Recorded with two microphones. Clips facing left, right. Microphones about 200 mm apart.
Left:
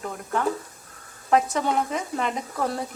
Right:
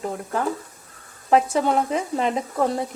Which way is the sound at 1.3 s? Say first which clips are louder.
Right 3 dB; 30° right (ahead or behind).